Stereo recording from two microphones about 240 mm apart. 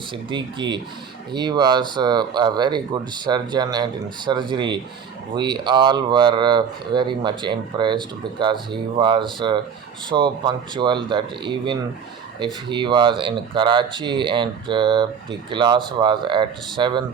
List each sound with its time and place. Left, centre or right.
0.3 s speech: centre